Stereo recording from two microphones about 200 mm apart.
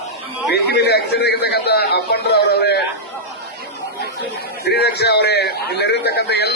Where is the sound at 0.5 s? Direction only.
55° left (ahead or behind).